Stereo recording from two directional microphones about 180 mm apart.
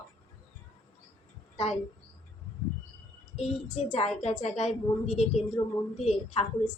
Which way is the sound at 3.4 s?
35° left (ahead or behind).